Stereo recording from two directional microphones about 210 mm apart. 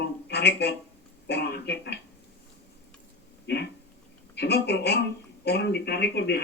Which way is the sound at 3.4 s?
50° left (ahead or behind).